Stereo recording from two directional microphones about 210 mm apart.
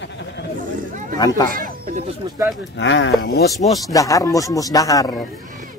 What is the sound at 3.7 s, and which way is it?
Speech, 15° left (ahead or behind).